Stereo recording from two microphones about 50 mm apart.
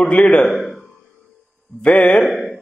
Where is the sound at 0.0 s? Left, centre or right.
Left.